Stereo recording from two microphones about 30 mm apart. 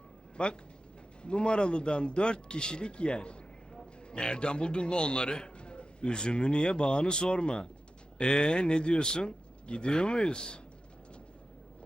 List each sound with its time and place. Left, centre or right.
0.4 s a man's voice: left